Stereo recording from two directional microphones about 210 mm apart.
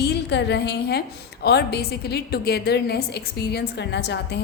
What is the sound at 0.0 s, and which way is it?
A woman's voice, 55° left (ahead or behind).